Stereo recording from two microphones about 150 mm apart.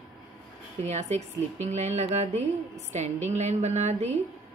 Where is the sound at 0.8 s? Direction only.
50° right (ahead or behind).